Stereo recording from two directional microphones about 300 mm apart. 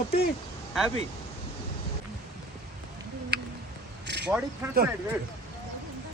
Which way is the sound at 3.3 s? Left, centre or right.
Right.